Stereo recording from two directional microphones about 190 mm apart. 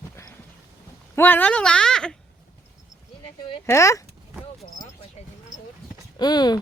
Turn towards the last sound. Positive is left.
turn(degrees=20)  # may be behind; listen again after turning